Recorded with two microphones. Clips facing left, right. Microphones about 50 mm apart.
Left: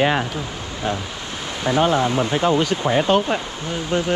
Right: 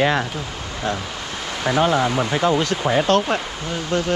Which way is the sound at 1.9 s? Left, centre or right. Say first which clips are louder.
Even; right.